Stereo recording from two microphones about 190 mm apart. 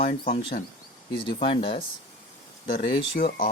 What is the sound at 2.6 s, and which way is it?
Speech, 45° left (ahead or behind).